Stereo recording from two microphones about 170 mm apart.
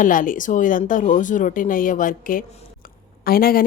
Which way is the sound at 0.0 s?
50° left (ahead or behind).